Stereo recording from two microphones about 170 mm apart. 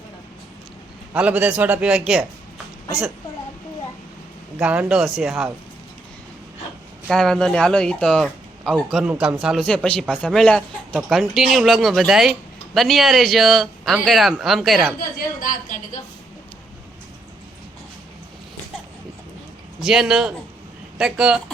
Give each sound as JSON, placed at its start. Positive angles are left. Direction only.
{"t": 1.1, "sound": "a man's voice", "side_deg": -10}
{"t": 4.5, "sound": "speech", "side_deg": -10}
{"t": 7.1, "sound": "speech", "side_deg": 5}
{"t": 14.9, "sound": "a woman's voice", "side_deg": 50}
{"t": 19.8, "sound": "speech", "side_deg": -5}